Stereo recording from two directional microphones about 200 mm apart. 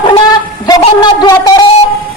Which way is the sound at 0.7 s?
20° left (ahead or behind).